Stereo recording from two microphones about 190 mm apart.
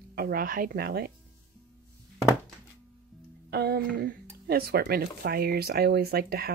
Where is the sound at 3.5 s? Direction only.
55° right (ahead or behind).